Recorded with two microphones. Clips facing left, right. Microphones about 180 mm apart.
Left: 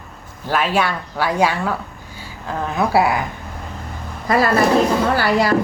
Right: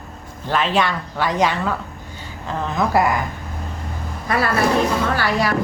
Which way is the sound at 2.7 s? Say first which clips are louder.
Left 1 dB; 10° left (ahead or behind).